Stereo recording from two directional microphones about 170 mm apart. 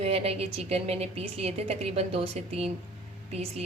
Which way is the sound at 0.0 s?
35° right (ahead or behind).